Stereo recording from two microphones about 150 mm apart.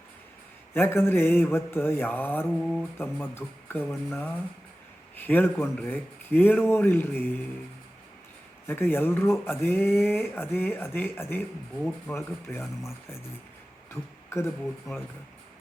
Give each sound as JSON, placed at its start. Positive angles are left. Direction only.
{"t": 0.7, "sound": "speech", "side_deg": 15}
{"t": 8.6, "sound": "speech", "side_deg": 15}
{"t": 14.3, "sound": "speech", "side_deg": 15}